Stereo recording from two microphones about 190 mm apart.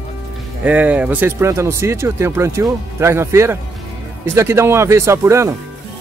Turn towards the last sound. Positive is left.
turn(degrees=-15)  # may be behind; listen again after turning